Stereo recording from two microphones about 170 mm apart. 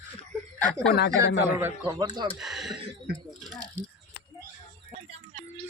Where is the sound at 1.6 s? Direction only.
15° right (ahead or behind).